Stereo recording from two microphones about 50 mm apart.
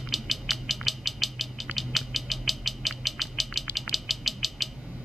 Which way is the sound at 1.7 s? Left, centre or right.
Centre.